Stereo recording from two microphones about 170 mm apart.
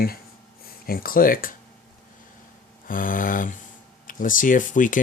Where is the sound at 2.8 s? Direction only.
55° left (ahead or behind).